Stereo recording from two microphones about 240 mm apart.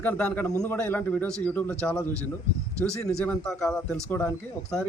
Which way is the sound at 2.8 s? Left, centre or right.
Centre.